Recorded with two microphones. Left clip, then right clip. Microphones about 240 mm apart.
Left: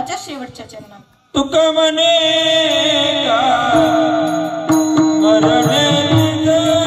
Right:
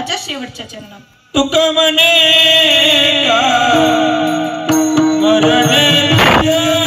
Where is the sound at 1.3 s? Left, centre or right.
Right.